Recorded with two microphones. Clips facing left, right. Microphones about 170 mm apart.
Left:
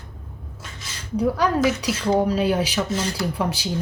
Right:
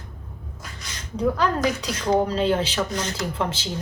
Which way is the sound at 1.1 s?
10° left (ahead or behind).